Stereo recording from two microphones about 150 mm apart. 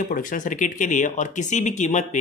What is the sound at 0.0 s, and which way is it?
Speech, 60° left (ahead or behind).